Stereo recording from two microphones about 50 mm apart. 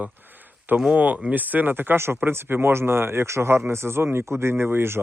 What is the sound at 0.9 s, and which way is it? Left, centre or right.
Speech, right.